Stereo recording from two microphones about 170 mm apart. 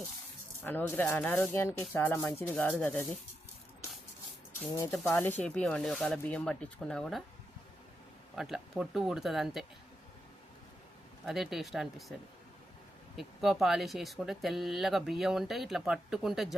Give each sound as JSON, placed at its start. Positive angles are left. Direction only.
{"t": 0.6, "sound": "speech", "side_deg": 10}
{"t": 4.6, "sound": "speech", "side_deg": 15}
{"t": 8.4, "sound": "speech", "side_deg": 0}
{"t": 11.3, "sound": "speech", "side_deg": 0}
{"t": 13.1, "sound": "speech", "side_deg": 0}